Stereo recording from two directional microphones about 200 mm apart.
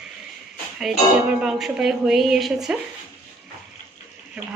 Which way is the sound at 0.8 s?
Centre (ahead or behind).